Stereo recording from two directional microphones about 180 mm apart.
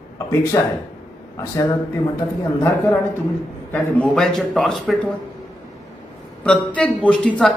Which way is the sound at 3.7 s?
5° left (ahead or behind).